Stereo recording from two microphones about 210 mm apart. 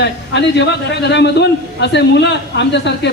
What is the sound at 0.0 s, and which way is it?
A man's voice, 55° left (ahead or behind).